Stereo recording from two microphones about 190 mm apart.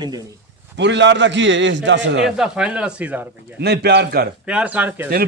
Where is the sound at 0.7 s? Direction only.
65° right (ahead or behind).